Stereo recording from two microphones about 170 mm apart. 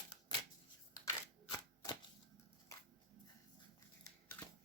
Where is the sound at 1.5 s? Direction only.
20° left (ahead or behind).